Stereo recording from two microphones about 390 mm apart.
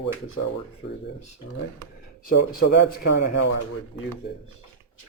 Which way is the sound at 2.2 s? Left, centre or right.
Left.